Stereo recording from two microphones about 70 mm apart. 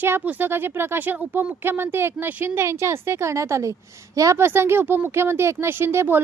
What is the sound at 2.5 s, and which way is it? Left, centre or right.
A woman's voice, right.